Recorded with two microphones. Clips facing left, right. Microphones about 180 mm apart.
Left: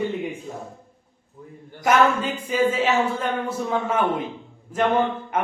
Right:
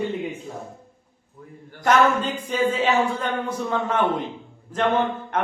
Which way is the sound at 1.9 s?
10° left (ahead or behind).